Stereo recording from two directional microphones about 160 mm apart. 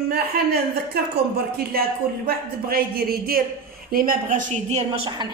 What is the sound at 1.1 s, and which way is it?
A woman's voice, 75° right (ahead or behind).